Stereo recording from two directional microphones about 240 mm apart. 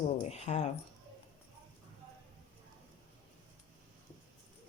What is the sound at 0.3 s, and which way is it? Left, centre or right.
Speech, left.